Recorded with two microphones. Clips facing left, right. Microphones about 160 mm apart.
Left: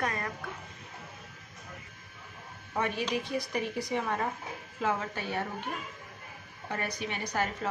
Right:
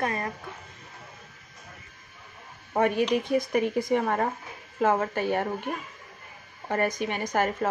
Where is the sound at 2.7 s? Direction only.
50° right (ahead or behind).